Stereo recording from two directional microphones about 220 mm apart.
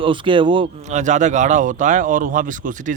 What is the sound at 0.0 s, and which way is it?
Speech, 20° right (ahead or behind).